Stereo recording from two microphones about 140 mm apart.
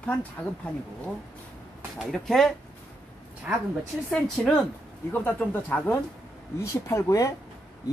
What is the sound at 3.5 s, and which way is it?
Speech, 10° right (ahead or behind).